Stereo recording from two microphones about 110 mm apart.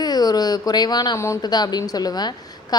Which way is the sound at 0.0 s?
35° left (ahead or behind).